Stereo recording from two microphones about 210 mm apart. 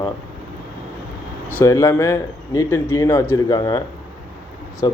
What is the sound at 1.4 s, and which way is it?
A man's voice, 10° left (ahead or behind).